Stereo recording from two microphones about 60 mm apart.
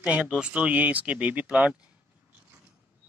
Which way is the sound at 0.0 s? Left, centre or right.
Centre.